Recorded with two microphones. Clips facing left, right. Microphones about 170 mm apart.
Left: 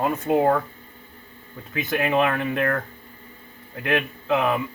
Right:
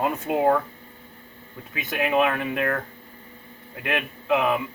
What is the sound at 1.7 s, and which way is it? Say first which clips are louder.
Speech: left 1 dB; 5° right (ahead or behind).